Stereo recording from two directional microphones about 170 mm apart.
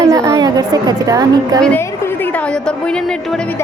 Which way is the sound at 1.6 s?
10° left (ahead or behind).